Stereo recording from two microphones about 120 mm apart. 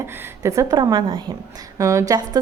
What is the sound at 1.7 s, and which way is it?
Speech, 25° right (ahead or behind).